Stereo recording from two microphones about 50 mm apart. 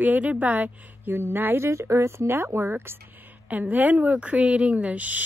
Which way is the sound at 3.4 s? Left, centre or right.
Right.